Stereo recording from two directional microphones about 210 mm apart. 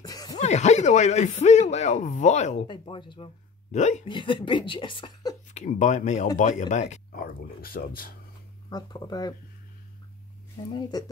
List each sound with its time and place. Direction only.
0.0 s a sound: 15° left (ahead or behind)
0.4 s speech: 35° left (ahead or behind)
3.7 s speech: 35° left (ahead or behind)
4.1 s speech: 25° left (ahead or behind)
5.5 s speech: 35° left (ahead or behind)
8.6 s speech: 20° left (ahead or behind)
10.7 s speech: 20° left (ahead or behind)